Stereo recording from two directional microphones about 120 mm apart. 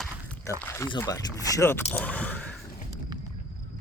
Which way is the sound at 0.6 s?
25° left (ahead or behind).